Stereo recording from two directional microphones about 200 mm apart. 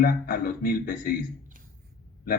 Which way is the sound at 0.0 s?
45° left (ahead or behind).